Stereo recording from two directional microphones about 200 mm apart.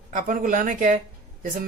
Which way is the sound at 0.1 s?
45° right (ahead or behind).